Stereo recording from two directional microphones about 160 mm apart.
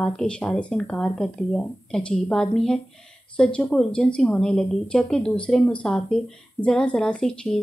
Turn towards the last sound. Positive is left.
turn(degrees=5)  # may be behind; listen again after turning